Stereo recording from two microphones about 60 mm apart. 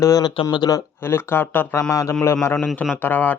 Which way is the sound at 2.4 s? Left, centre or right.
Left.